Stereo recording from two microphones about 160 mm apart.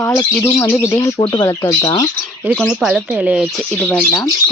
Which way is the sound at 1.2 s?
25° left (ahead or behind).